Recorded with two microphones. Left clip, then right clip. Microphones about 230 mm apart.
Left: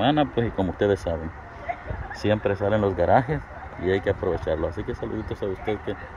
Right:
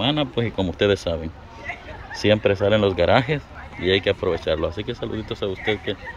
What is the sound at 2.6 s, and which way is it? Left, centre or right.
Speech, right.